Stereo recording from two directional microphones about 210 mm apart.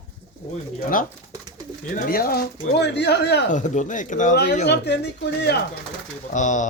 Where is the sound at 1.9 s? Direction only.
45° left (ahead or behind).